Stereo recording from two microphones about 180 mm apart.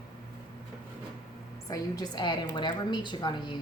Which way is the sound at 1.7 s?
25° left (ahead or behind).